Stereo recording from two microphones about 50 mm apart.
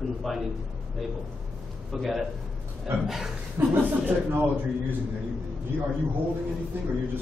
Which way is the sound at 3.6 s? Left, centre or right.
Right.